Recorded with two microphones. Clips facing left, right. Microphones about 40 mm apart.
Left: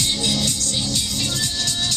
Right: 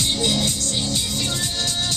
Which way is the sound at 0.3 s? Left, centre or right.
Right.